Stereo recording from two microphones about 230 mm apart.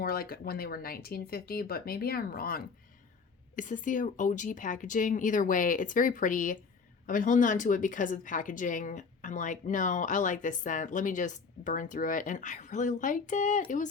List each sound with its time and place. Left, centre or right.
0.0 s speech: left